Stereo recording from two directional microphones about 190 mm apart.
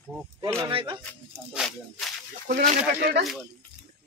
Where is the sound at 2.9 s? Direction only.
60° right (ahead or behind).